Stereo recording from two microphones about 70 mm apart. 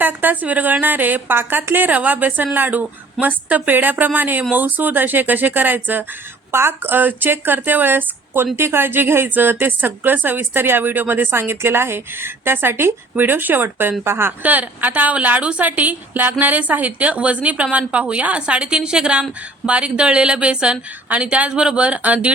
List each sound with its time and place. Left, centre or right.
0.0 s a woman's voice: right
14.4 s a woman's voice: right